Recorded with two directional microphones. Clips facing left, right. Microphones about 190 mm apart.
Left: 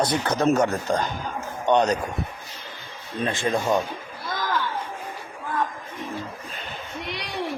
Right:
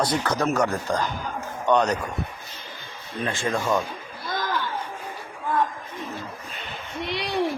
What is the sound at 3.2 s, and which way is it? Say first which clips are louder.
Speech: left 2 dB; 20° left (ahead or behind).